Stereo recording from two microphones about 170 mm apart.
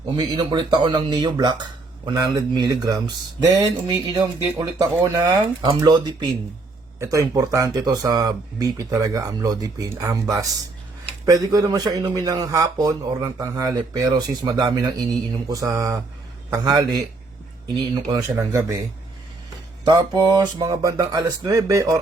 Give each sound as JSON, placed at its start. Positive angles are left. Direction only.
{"t": 0.2, "sound": "speech", "side_deg": -25}
{"t": 18.1, "sound": "speech", "side_deg": -15}
{"t": 19.8, "sound": "speech", "side_deg": -25}